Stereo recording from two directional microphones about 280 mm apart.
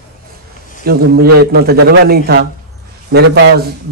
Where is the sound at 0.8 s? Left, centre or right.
Right.